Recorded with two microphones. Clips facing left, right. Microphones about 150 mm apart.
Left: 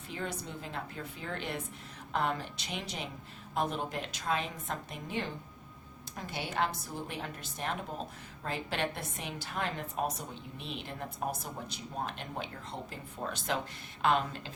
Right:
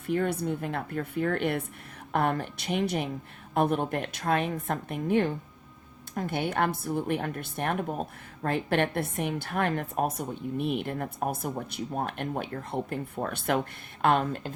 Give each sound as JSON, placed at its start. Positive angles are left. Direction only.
{"t": 0.1, "sound": "a woman's voice", "side_deg": -55}